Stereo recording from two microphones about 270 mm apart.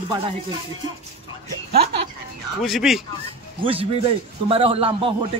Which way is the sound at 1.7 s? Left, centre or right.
Right.